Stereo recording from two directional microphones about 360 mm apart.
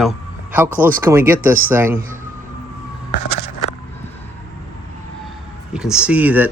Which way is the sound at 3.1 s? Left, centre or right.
Left.